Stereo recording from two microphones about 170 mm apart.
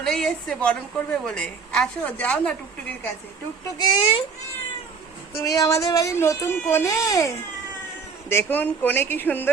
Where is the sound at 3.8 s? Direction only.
25° left (ahead or behind).